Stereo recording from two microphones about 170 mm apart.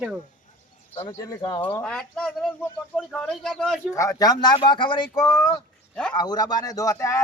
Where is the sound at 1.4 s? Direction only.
25° left (ahead or behind).